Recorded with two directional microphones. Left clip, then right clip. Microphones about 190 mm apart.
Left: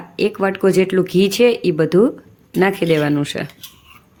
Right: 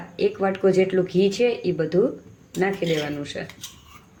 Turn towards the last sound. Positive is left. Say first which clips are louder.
# left 9 dB
turn(degrees=45)  # may be behind; listen again after turning